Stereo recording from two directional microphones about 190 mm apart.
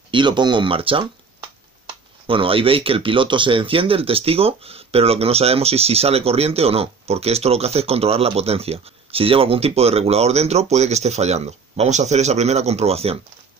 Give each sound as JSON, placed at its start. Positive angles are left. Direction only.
{"t": 0.1, "sound": "speech", "side_deg": -25}